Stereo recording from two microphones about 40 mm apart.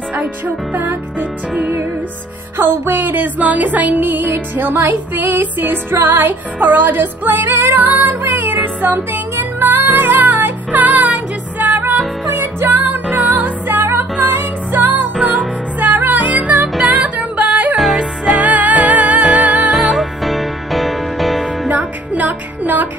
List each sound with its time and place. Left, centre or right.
2.5 s music: right
12.4 s music: right
12.7 s music: right
13.1 s music: centre
13.4 s music: right
17.9 s music: right
18.4 s music: right
19.4 s music: right
19.7 s music: centre
21.6 s music: right